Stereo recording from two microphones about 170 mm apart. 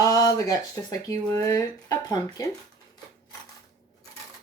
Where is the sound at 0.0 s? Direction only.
20° left (ahead or behind).